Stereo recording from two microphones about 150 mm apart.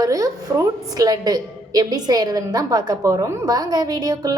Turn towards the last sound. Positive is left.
turn(degrees=-25)  # may be behind; listen again after turning